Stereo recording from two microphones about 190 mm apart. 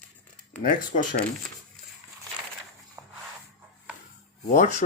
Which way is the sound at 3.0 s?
15° right (ahead or behind).